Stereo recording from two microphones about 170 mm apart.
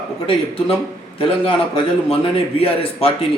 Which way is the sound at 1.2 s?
30° left (ahead or behind).